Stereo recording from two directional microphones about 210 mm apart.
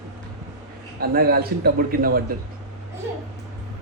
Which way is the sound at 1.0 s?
45° right (ahead or behind).